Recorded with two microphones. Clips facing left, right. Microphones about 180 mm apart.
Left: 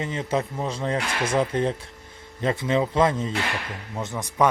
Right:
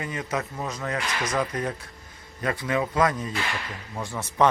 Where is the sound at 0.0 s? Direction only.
25° left (ahead or behind).